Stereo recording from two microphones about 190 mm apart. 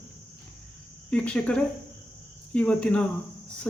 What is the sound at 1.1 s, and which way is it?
Speech, 5° left (ahead or behind).